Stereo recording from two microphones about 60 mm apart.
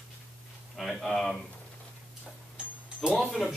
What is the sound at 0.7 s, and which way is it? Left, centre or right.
Speech, centre.